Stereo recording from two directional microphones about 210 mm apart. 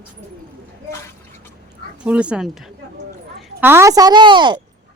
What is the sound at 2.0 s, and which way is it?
Speech, 5° right (ahead or behind).